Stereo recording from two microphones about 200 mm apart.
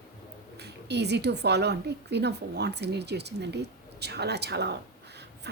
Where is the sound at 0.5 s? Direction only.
55° right (ahead or behind).